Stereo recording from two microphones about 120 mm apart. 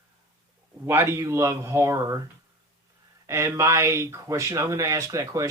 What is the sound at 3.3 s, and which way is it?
Speech, 25° right (ahead or behind).